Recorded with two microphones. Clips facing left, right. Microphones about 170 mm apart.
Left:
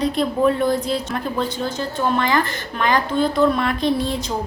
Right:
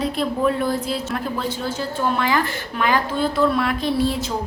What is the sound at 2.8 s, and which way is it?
A woman's voice, 5° right (ahead or behind).